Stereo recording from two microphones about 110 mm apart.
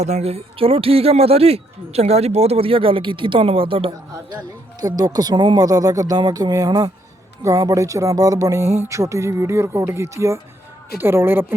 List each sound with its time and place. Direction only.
0.0 s speech: 80° right; by 4.4 s 55° right (ahead or behind)
4.8 s speech: 35° right (ahead or behind); by 11.5 s 20° right (ahead or behind)